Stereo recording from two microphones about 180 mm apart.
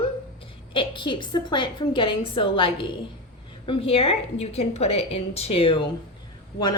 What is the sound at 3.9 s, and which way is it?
A woman's voice, 35° left (ahead or behind).